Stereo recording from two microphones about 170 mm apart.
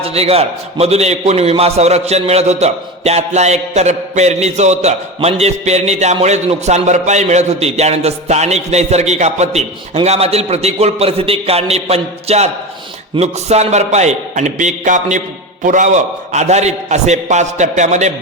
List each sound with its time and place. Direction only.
0.0 s a man's voice: 35° right (ahead or behind)